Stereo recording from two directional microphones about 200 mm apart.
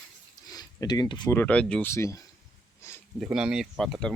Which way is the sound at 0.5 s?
20° left (ahead or behind).